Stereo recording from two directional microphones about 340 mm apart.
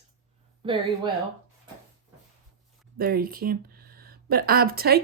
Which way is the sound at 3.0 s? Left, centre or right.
Right.